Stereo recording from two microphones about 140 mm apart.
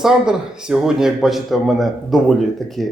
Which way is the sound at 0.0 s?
5° right (ahead or behind).